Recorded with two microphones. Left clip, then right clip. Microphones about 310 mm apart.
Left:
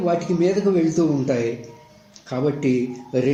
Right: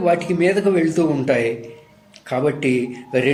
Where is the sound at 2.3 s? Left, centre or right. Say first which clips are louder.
Right 3 dB; right.